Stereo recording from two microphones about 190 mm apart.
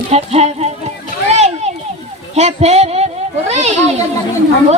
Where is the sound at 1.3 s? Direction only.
35° right (ahead or behind).